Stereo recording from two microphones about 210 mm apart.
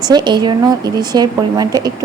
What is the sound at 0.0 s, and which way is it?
A woman's voice, 20° right (ahead or behind).